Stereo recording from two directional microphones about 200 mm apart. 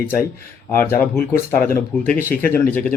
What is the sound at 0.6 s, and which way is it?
Speech, 10° left (ahead or behind).